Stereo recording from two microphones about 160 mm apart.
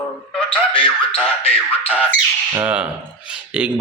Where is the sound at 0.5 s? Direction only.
35° left (ahead or behind).